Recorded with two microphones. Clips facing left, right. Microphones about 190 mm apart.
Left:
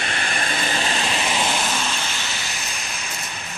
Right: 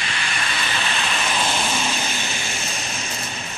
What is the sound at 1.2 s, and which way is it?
Vehicle, 15° left (ahead or behind).